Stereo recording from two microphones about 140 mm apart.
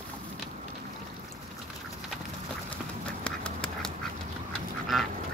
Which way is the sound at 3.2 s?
5° left (ahead or behind).